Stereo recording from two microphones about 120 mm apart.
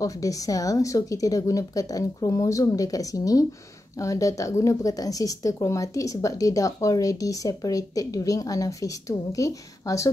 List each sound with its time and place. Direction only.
0.0 s speech: 30° left (ahead or behind)